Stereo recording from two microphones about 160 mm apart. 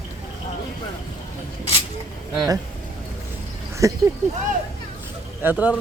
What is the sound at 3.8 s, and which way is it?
Speech, 20° right (ahead or behind).